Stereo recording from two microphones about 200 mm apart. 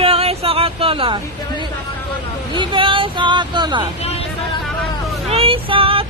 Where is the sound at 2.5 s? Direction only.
25° right (ahead or behind).